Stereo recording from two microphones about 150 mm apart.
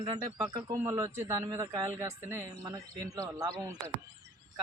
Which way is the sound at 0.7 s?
20° right (ahead or behind).